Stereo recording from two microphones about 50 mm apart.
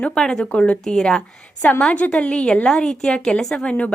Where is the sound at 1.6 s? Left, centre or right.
Left.